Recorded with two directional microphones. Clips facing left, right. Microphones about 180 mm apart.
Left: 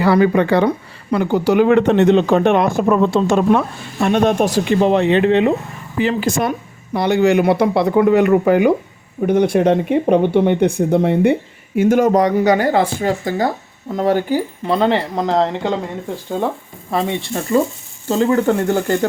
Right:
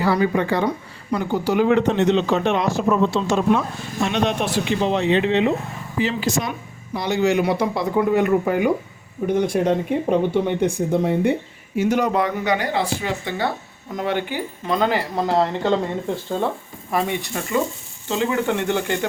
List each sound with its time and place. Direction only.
0.0 s speech: 70° left (ahead or behind)
11.8 s speech: 50° left (ahead or behind); by 15.7 s 20° left (ahead or behind)
16.9 s speech: 25° left (ahead or behind); by 18.9 s 40° left (ahead or behind)